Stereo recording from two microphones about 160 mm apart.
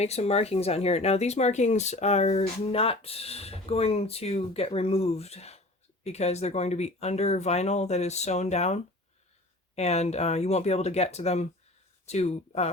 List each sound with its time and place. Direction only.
0.0 s speech: 40° left (ahead or behind)